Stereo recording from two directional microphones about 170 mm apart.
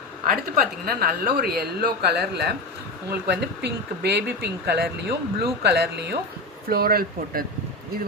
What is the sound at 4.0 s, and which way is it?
Speech, 80° right.